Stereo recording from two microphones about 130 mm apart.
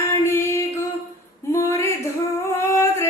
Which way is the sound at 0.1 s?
20° left (ahead or behind).